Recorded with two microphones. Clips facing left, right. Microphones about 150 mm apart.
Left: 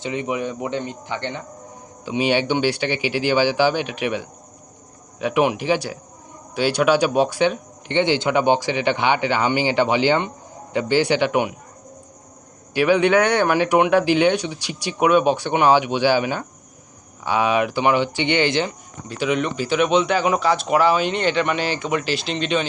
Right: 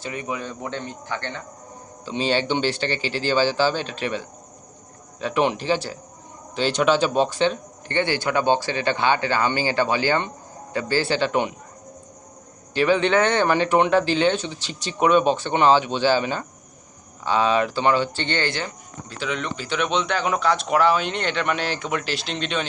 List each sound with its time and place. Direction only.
0.0 s speech: 20° left (ahead or behind)
12.7 s speech: 10° left (ahead or behind)